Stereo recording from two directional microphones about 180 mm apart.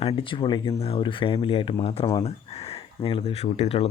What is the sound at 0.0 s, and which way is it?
Speech, 30° left (ahead or behind).